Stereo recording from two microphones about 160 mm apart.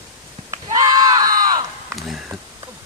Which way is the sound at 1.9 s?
Centre (ahead or behind).